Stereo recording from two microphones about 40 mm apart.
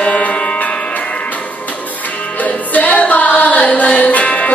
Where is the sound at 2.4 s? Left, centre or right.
Left.